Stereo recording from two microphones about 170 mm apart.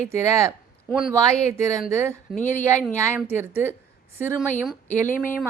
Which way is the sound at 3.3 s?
15° right (ahead or behind).